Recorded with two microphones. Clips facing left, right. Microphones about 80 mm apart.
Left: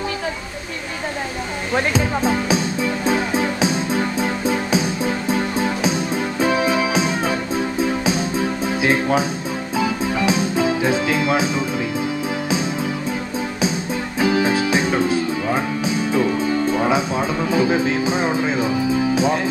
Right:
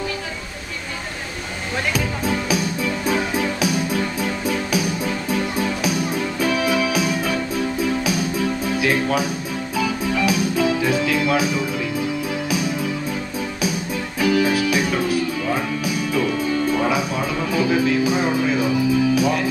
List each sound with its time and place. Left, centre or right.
2.0 s music: left
14.2 s music: left